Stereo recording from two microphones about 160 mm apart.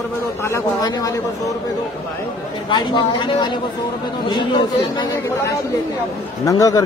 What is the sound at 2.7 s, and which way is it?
A man's voice, 30° left (ahead or behind).